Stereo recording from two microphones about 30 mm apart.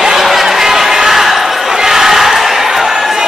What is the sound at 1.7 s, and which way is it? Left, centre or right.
Crowd, centre.